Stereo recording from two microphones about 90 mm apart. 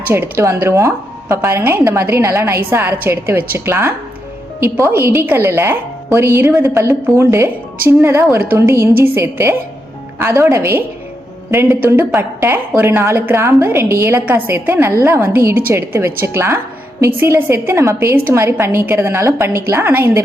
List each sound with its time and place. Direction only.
0.1 s a woman's voice: 20° right (ahead or behind)
0.4 s a woman's voice: 30° right (ahead or behind)